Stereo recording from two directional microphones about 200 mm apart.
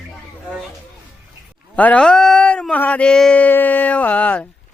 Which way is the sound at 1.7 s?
5° left (ahead or behind).